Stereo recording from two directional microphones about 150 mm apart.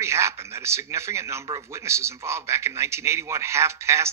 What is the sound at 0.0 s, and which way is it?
A man's voice, 20° right (ahead or behind).